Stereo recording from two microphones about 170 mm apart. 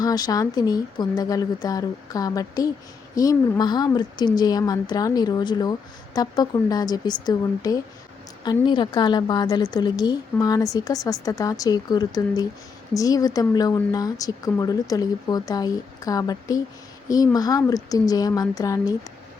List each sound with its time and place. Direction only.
0.0 s a woman's voice: 20° left (ahead or behind)